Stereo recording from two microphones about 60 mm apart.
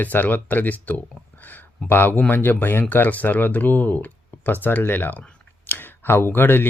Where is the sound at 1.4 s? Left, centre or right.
Left.